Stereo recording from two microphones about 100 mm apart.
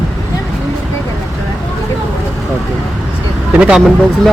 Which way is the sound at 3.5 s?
10° right (ahead or behind).